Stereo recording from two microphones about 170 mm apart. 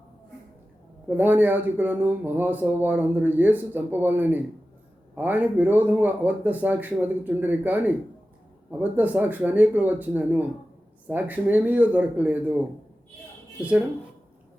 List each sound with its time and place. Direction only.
1.0 s speech: 10° right (ahead or behind)